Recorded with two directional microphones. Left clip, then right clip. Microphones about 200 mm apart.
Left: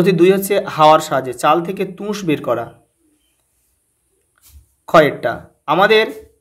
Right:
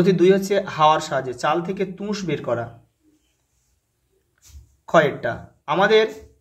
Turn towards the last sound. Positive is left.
turn(degrees=35)  # may be behind; listen again after turning